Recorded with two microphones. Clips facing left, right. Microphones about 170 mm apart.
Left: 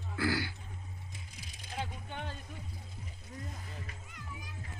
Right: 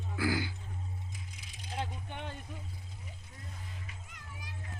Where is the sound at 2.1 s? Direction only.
15° right (ahead or behind).